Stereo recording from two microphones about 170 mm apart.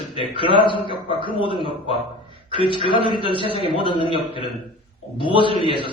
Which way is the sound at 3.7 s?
30° left (ahead or behind).